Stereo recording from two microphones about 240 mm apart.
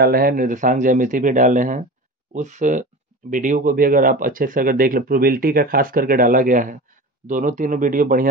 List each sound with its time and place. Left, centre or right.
0.0 s speech: right